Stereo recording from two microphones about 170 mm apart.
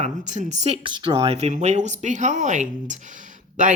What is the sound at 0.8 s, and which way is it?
Speech, 25° right (ahead or behind).